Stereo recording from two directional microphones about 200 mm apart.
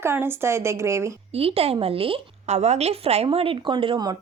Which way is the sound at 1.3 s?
30° right (ahead or behind).